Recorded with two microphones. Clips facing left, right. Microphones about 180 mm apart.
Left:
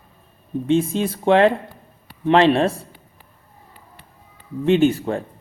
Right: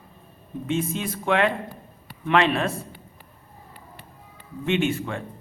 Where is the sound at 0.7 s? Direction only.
30° left (ahead or behind).